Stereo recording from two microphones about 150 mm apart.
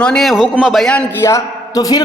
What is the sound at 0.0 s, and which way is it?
A man's voice, 5° left (ahead or behind).